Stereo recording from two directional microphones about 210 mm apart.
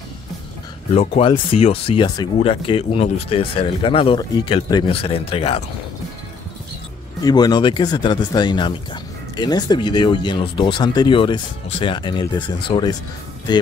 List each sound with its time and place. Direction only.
0.9 s speech: 25° left (ahead or behind)
7.2 s speech: 20° left (ahead or behind)